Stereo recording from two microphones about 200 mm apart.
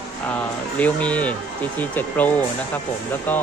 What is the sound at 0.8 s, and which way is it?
Speech, 5° left (ahead or behind).